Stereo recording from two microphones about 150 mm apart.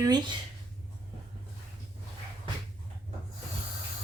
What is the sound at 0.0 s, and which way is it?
Speech, 30° right (ahead or behind).